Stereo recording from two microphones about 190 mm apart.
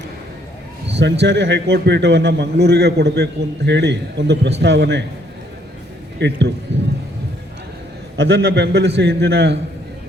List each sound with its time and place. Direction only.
0.9 s a man's voice: 65° right (ahead or behind)
6.1 s a man's voice: 65° right (ahead or behind)
8.2 s a man's voice: 65° right (ahead or behind)